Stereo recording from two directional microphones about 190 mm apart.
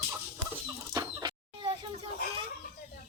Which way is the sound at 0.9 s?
20° right (ahead or behind).